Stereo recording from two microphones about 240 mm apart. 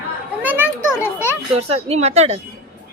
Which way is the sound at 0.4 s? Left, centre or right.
Centre.